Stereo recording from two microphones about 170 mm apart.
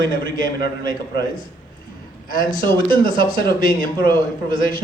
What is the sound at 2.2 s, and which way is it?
Speech, 55° left (ahead or behind).